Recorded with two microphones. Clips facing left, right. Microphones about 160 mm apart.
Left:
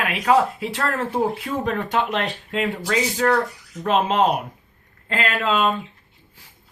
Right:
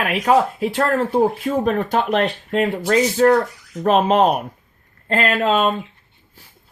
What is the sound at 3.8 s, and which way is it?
Speech, 50° right (ahead or behind).